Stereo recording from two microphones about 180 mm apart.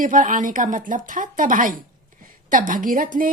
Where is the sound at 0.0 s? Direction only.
50° right (ahead or behind).